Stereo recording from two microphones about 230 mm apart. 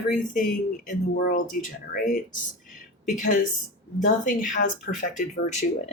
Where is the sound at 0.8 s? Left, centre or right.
Left.